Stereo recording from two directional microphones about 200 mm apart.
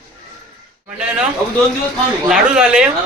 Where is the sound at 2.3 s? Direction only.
5° right (ahead or behind).